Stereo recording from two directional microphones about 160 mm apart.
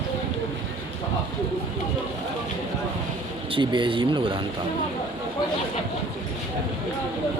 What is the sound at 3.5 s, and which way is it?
Speech, 30° right (ahead or behind).